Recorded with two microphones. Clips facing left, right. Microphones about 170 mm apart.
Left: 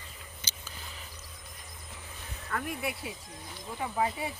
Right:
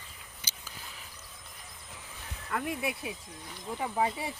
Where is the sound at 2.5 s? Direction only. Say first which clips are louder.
Right 1 dB; 15° right (ahead or behind).